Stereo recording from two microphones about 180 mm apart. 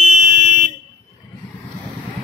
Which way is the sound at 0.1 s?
45° right (ahead or behind).